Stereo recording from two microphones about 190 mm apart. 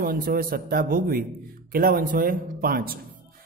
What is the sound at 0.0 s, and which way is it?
Speech, 50° right (ahead or behind).